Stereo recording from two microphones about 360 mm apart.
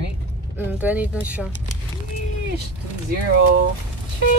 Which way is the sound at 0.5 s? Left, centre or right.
Centre.